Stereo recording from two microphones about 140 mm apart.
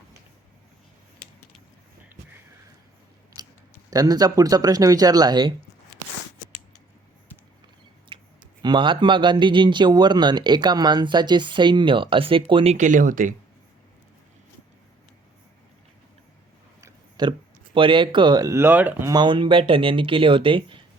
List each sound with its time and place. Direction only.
3.8 s speech: 25° right (ahead or behind)
8.6 s speech: 35° right (ahead or behind)
12.7 s speech: 65° right (ahead or behind)
17.2 s speech: 30° right (ahead or behind); by 19.1 s 15° right (ahead or behind)
19.1 s speech: 35° right (ahead or behind)